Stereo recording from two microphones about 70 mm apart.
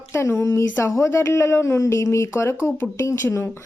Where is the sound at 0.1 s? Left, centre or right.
Left.